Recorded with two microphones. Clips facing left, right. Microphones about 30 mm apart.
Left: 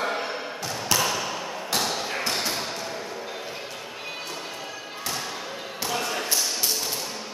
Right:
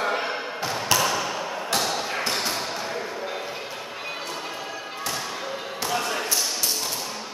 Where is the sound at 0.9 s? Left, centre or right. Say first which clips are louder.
Right 1 dB; centre.